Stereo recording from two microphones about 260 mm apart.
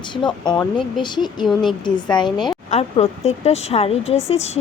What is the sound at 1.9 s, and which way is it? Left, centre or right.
A woman's voice, centre.